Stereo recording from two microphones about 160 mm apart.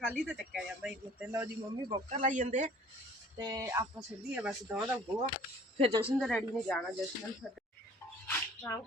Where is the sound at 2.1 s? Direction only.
50° right (ahead or behind).